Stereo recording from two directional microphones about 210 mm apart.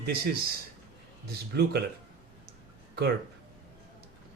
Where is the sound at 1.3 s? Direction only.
50° right (ahead or behind).